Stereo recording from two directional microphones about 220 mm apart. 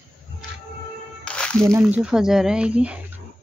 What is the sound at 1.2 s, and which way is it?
Music, 5° left (ahead or behind).